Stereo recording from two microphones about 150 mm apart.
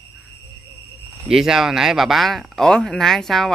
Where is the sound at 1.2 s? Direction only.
5° right (ahead or behind).